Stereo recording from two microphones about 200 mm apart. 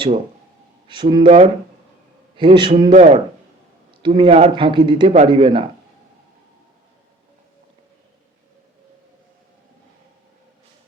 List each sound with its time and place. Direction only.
0.9 s a man's voice: 25° right (ahead or behind)
2.9 s speech: 40° right (ahead or behind)
4.0 s a man's voice: 25° right (ahead or behind)